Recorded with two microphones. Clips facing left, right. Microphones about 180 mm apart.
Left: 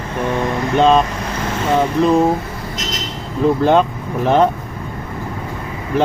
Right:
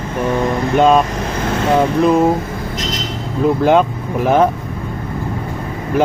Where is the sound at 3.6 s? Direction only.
10° right (ahead or behind).